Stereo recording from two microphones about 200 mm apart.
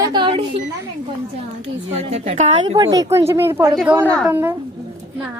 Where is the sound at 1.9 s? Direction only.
30° right (ahead or behind); by 4.0 s 5° right (ahead or behind).